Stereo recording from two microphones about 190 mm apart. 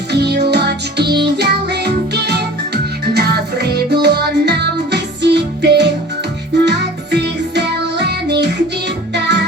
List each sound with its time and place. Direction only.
0.1 s music: 60° right (ahead or behind)